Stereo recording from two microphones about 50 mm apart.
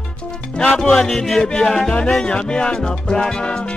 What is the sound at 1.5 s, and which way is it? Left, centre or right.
Music, centre.